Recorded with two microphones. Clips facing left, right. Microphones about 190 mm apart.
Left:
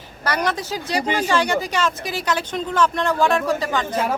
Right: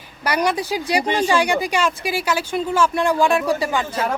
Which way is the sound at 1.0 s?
10° left (ahead or behind).